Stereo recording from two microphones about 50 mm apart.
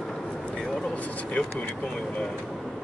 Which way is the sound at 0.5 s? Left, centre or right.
Centre.